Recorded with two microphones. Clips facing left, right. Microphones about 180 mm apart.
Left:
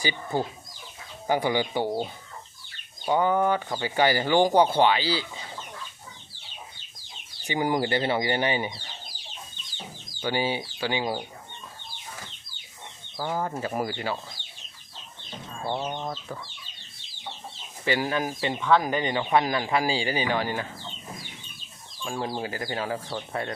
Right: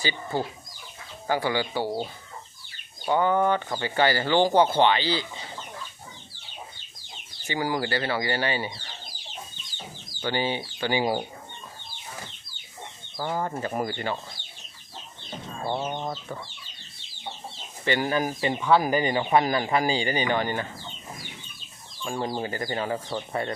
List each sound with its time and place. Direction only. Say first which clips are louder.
0.0 s speech: left 1 dB; 15° left (ahead or behind)
3.1 s speech: even; 10° left (ahead or behind)
7.4 s speech: left 2 dB; 20° left (ahead or behind)
10.2 s speech: even; 10° left (ahead or behind)
10.8 s speech: right 3 dB; 10° right (ahead or behind)
13.1 s speech: even; centre (ahead or behind)
15.7 s speech: right 1 dB; 5° right (ahead or behind)
17.8 s speech: right 1 dB; 5° left (ahead or behind)
22.0 s speech: right 1 dB; 5° left (ahead or behind)